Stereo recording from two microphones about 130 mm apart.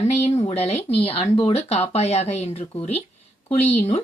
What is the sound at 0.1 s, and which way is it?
Speech, 55° left (ahead or behind).